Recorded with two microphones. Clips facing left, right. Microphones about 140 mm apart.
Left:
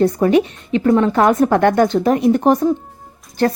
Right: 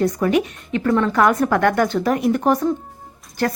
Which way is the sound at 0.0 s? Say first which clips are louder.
Left 5 dB; 30° left (ahead or behind).